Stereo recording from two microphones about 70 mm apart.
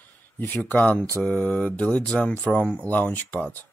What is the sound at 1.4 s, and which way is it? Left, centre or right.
Mantra, centre.